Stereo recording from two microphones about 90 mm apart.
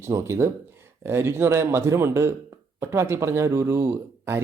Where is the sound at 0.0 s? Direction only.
35° right (ahead or behind).